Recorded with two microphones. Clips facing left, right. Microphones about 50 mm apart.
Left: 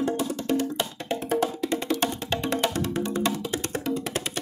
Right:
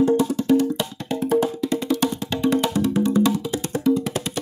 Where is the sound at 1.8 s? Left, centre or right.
Left.